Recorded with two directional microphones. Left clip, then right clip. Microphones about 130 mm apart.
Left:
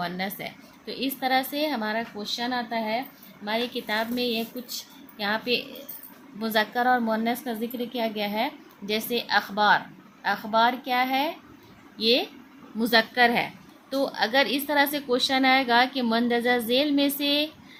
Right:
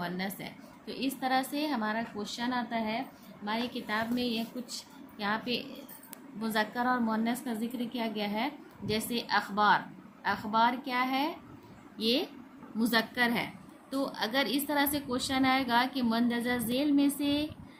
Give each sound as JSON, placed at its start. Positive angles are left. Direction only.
{"t": 0.0, "sound": "a woman's voice", "side_deg": 45}